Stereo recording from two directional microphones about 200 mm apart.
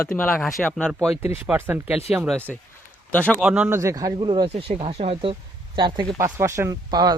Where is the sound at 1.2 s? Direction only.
10° right (ahead or behind); by 3.3 s 5° left (ahead or behind).